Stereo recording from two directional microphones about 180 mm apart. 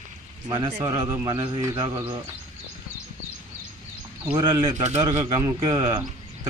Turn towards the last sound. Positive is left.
turn(degrees=-20)  # may be behind; listen again after turning